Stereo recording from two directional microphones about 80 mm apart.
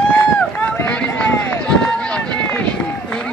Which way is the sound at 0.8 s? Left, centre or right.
Centre.